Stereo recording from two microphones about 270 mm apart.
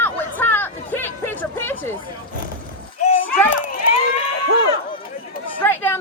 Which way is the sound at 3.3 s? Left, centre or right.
Centre.